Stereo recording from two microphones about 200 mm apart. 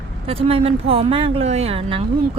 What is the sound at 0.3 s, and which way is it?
A woman's voice, 30° right (ahead or behind).